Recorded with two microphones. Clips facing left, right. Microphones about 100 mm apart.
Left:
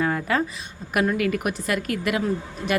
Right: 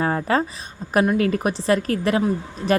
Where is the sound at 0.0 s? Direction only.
35° right (ahead or behind).